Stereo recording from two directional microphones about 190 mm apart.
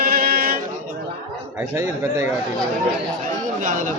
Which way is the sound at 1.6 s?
15° right (ahead or behind).